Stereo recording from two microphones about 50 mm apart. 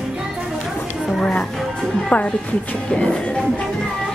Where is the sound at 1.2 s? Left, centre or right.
Centre.